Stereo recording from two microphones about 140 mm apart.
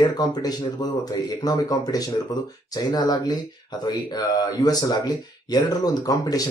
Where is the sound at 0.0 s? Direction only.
30° left (ahead or behind).